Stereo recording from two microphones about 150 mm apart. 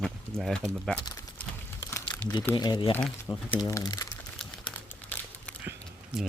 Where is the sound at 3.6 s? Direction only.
25° left (ahead or behind).